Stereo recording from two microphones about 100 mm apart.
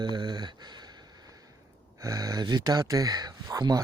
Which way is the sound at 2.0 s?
35° right (ahead or behind).